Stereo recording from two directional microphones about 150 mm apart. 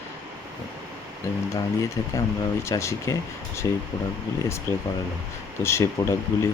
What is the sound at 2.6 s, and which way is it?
Speech, 20° left (ahead or behind).